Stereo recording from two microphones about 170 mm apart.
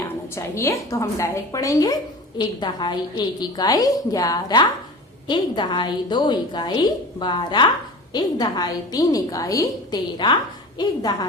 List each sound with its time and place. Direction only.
0.3 s a woman's voice: 15° left (ahead or behind)